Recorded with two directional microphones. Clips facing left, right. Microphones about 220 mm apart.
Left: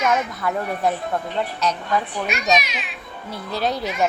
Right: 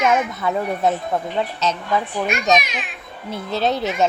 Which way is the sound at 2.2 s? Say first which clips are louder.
Right 4 dB; 50° right (ahead or behind).